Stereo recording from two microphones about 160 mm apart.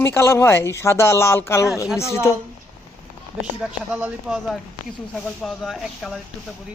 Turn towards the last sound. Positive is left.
turn(degrees=0)  # may be behind; listen again after turning